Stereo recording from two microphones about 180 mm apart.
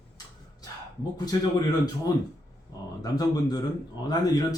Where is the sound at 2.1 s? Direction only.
20° left (ahead or behind).